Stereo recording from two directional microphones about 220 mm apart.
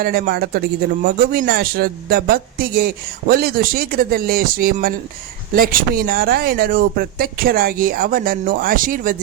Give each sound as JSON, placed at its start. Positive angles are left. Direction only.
{"t": 0.0, "sound": "speech", "side_deg": -45}